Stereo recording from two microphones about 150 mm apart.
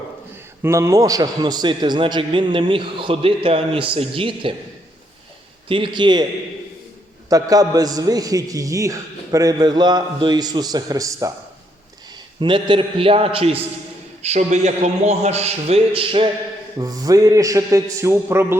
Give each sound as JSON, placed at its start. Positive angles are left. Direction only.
{"t": 0.6, "sound": "a man's voice", "side_deg": -20}
{"t": 5.6, "sound": "a man's voice", "side_deg": -35}
{"t": 7.3, "sound": "a man's voice", "side_deg": -25}
{"t": 12.4, "sound": "a man's voice", "side_deg": -30}
{"t": 16.7, "sound": "a man's voice", "side_deg": -25}